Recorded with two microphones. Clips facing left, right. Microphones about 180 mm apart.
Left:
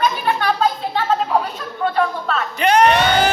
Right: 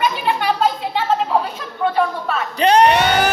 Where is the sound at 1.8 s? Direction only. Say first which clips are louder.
Right 1 dB; 10° right (ahead or behind).